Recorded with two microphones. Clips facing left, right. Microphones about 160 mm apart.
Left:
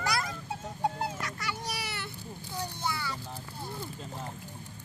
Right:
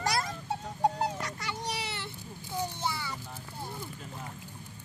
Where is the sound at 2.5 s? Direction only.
20° right (ahead or behind).